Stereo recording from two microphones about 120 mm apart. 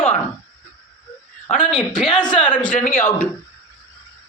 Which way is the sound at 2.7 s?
90° left.